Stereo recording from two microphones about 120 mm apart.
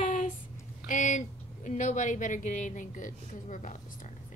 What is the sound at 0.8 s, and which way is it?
A woman's voice, 90° left.